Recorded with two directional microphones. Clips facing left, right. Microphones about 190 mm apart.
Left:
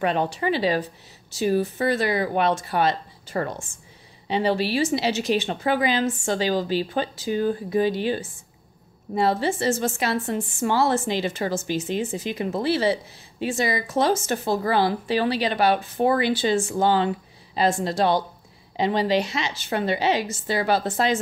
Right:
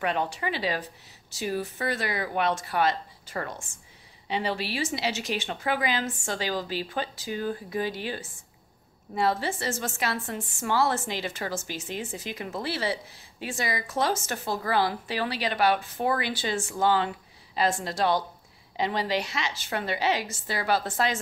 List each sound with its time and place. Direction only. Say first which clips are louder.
0.0 s a woman's voice: left 5 dB; 30° left (ahead or behind)